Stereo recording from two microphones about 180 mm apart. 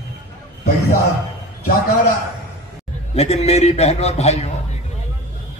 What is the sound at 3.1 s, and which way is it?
A man's voice, 35° left (ahead or behind).